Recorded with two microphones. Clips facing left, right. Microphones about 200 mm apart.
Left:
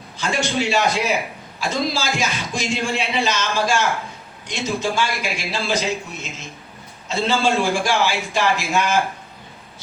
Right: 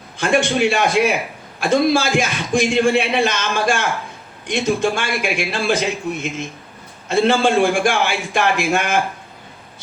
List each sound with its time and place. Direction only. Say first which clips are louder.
0.2 s a man's voice: right 6 dB; 55° right (ahead or behind)